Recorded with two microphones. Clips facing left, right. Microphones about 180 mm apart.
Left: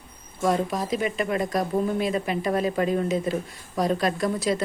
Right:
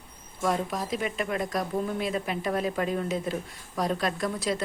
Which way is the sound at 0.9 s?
Centre (ahead or behind).